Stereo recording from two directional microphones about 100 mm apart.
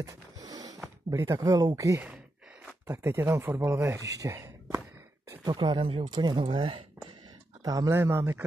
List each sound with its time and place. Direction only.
0.0 s a sound: 40° right (ahead or behind)
1.1 s speech: 35° right (ahead or behind)
2.9 s speech: 25° right (ahead or behind)
5.4 s speech: 50° right (ahead or behind)
6.3 s speech: 60° right (ahead or behind)
7.6 s speech: 40° right (ahead or behind)
7.9 s speech: 25° right (ahead or behind)